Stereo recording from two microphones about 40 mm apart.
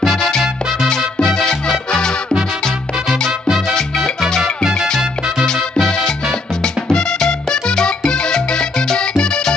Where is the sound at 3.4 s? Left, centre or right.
Centre.